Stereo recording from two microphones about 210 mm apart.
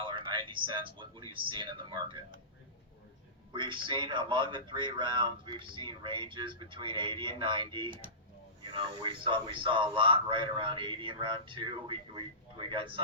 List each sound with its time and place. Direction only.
0.0 s speech: 20° right (ahead or behind)
3.5 s speech: 25° right (ahead or behind)